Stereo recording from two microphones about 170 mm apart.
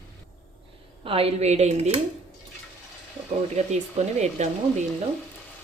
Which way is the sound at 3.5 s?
40° right (ahead or behind).